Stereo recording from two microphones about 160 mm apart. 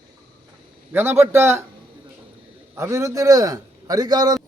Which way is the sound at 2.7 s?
20° right (ahead or behind).